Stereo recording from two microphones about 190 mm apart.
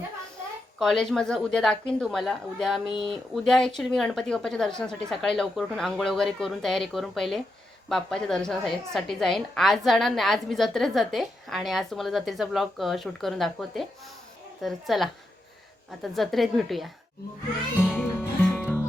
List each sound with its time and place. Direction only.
0.8 s a woman's voice: 5° left (ahead or behind)
2.8 s speech: 25° left (ahead or behind)
3.1 s a woman's voice: centre (ahead or behind)
16.1 s a woman's voice: centre (ahead or behind)
17.7 s music: 5° left (ahead or behind)